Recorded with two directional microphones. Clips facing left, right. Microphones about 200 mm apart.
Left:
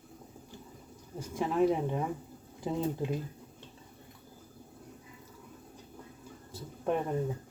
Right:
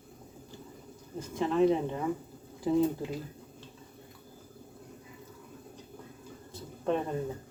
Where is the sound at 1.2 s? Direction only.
10° left (ahead or behind).